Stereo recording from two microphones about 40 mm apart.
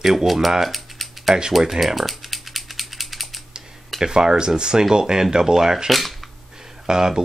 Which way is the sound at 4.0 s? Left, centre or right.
Centre.